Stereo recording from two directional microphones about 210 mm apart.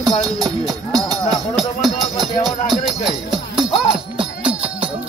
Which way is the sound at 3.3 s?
20° right (ahead or behind).